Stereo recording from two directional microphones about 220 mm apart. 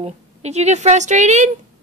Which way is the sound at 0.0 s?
30° right (ahead or behind).